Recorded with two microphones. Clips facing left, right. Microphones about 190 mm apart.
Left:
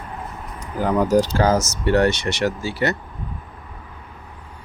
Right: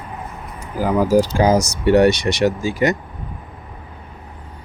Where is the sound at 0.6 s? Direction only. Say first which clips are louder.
Right 2 dB; 5° right (ahead or behind).